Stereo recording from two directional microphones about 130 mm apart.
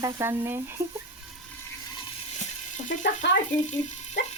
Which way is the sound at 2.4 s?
70° left (ahead or behind).